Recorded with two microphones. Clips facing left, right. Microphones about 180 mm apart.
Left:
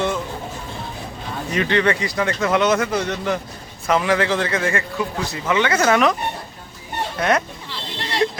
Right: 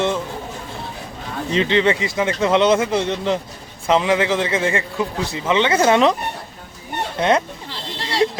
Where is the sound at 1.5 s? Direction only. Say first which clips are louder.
Right 2 dB; 20° right (ahead or behind).